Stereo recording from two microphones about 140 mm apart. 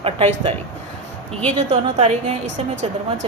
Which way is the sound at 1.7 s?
50° right (ahead or behind).